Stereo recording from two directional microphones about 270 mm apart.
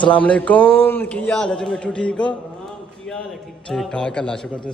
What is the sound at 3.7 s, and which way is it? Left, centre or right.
Speech, centre.